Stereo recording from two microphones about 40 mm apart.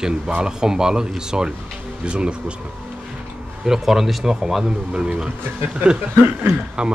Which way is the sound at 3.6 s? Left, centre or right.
Centre.